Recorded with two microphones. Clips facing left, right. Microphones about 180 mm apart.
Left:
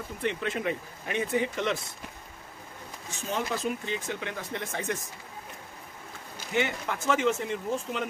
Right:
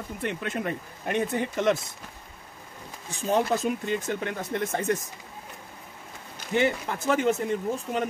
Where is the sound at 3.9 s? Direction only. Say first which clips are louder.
Right 5 dB; 50° right (ahead or behind).